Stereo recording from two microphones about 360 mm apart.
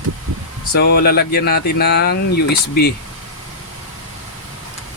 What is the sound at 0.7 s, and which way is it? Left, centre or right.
Speech, left.